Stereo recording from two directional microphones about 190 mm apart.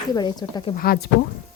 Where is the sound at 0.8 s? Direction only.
55° left (ahead or behind).